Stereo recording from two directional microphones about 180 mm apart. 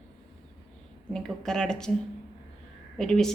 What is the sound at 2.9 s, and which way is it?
Speech, 5° left (ahead or behind).